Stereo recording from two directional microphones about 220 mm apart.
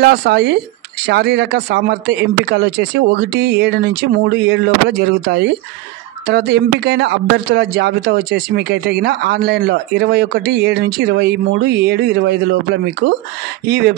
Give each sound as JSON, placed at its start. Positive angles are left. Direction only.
{"t": 0.0, "sound": "speech", "side_deg": -50}
{"t": 13.7, "sound": "speech", "side_deg": -45}